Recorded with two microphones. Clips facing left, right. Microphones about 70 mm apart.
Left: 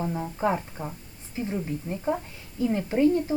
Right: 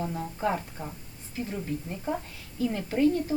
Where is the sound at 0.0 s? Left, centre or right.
Centre.